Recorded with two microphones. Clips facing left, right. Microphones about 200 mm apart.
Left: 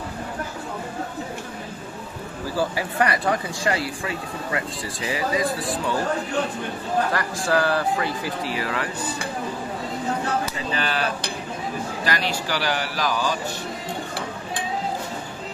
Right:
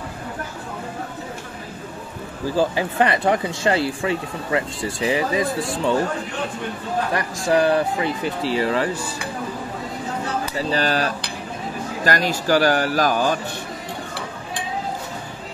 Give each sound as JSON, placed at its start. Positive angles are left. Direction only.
{"t": 2.5, "sound": "speech", "side_deg": -20}
{"t": 7.2, "sound": "speech", "side_deg": -20}
{"t": 10.6, "sound": "speech", "side_deg": -40}